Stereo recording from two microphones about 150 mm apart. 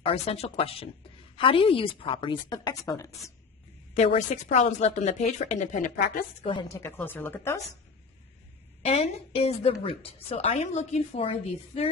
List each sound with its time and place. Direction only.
0.0 s speech: 45° left (ahead or behind); by 3.1 s 20° left (ahead or behind)
3.9 s a woman's voice: 50° left (ahead or behind); by 6.2 s 65° left (ahead or behind)
6.7 s speech: 15° left (ahead or behind)
8.8 s a woman's voice: 45° left (ahead or behind)